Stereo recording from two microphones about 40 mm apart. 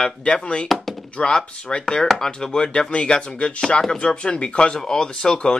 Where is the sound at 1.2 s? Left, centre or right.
Centre.